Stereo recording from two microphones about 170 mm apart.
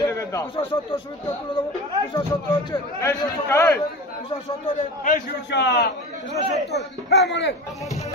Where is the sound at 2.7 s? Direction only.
15° left (ahead or behind).